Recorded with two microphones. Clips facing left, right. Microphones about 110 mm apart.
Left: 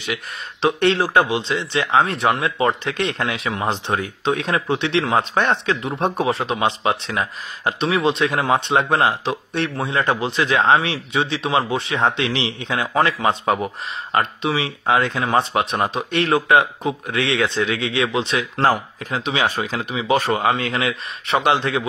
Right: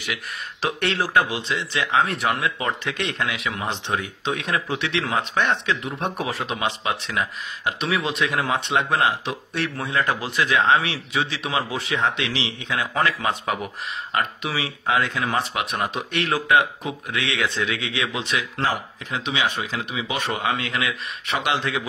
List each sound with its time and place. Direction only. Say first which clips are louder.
0.1 s speech: left 4 dB; 25° left (ahead or behind)
18.6 s speech: left 6 dB; 45° left (ahead or behind)
19.1 s speech: left 4 dB; 35° left (ahead or behind)